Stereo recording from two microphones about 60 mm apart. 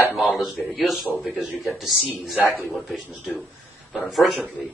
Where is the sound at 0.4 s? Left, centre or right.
Centre.